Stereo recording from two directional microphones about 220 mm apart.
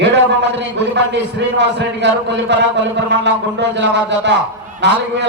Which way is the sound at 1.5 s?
50° right (ahead or behind).